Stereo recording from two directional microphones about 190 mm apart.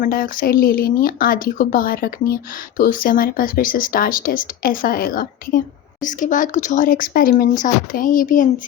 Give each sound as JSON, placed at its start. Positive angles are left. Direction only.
{"t": 0.0, "sound": "speech", "side_deg": 45}